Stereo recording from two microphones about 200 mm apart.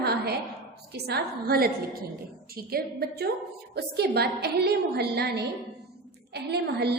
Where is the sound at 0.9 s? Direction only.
55° right (ahead or behind).